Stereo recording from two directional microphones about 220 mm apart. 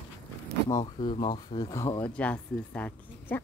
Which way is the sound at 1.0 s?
20° left (ahead or behind).